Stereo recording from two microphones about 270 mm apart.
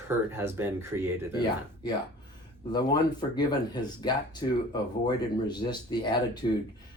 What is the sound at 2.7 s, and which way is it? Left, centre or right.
Speech, centre.